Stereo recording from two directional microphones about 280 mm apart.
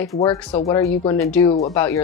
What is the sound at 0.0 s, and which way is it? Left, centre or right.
Speech, centre.